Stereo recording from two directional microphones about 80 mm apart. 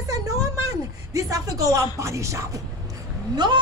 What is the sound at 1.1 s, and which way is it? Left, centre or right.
Speech, right.